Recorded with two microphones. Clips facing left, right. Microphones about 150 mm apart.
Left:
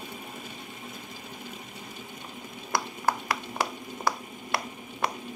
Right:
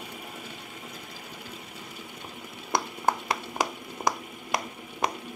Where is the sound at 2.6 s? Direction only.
20° right (ahead or behind).